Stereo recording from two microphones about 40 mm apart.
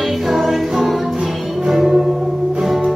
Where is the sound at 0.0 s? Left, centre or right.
Centre.